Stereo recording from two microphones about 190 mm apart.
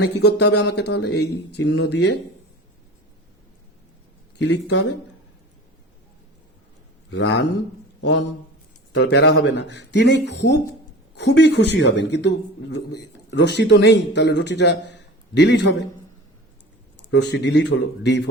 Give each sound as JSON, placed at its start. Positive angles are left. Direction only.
{"t": 0.3, "sound": "speech", "side_deg": 60}
{"t": 4.4, "sound": "speech", "side_deg": 65}
{"t": 7.1, "sound": "a man's voice", "side_deg": 65}
{"t": 17.1, "sound": "speech", "side_deg": 65}